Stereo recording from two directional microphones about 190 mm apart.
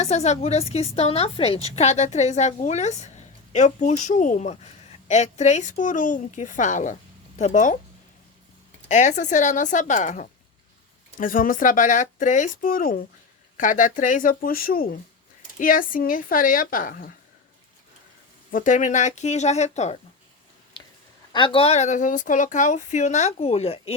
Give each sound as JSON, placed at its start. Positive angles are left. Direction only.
{"t": 0.0, "sound": "a woman's voice", "side_deg": 35}
{"t": 8.9, "sound": "a woman's voice", "side_deg": 40}
{"t": 18.5, "sound": "a woman's voice", "side_deg": 45}
{"t": 21.3, "sound": "a woman's voice", "side_deg": 25}